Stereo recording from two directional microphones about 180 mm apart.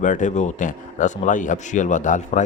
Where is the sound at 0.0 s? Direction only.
45° left (ahead or behind).